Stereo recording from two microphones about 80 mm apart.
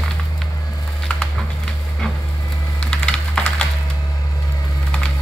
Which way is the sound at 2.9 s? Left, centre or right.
Centre.